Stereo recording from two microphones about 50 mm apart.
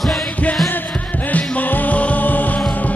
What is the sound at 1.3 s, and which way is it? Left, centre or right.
Music, left.